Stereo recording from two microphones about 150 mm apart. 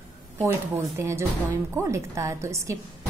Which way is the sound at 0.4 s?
20° right (ahead or behind).